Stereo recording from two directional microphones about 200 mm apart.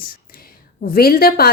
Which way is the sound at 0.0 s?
50° left (ahead or behind).